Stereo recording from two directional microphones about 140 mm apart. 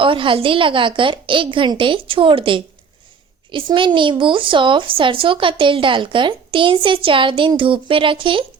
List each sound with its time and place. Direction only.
0.0 s a woman's voice: 35° right (ahead or behind)